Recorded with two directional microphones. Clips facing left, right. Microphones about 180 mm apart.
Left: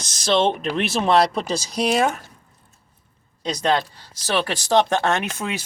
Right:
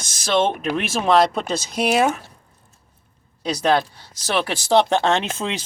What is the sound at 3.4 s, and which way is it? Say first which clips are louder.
Speech: right 2 dB; 10° right (ahead or behind).